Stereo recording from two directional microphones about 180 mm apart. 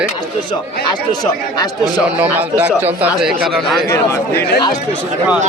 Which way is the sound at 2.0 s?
10° right (ahead or behind).